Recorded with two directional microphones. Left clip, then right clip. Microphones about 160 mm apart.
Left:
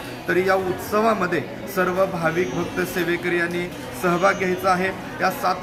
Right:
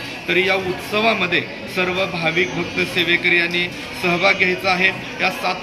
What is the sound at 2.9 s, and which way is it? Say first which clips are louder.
Speech: right 8 dB; 55° left (ahead or behind).